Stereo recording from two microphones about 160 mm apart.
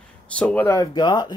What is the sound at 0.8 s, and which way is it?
Speech, 25° left (ahead or behind).